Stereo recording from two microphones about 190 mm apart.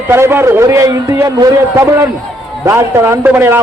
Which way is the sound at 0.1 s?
15° right (ahead or behind).